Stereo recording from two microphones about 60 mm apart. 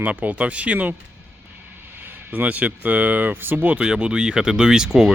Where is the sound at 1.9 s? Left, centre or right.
Right.